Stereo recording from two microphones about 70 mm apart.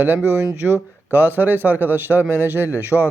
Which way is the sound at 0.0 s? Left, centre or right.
Right.